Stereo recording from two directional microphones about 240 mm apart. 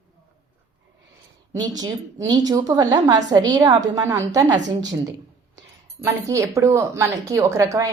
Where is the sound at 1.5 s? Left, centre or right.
Centre.